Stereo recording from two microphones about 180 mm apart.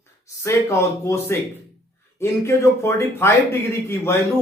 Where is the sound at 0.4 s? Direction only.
15° left (ahead or behind).